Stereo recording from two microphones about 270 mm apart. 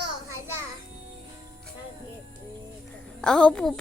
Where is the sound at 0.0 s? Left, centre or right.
Right.